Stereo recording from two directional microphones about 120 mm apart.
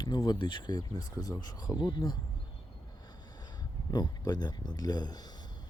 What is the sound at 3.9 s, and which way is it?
Speech, 35° left (ahead or behind).